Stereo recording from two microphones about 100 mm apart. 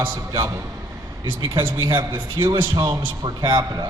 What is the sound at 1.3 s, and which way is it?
Speech, 55° right (ahead or behind).